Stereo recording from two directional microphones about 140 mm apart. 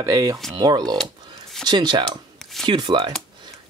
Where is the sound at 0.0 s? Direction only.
20° right (ahead or behind).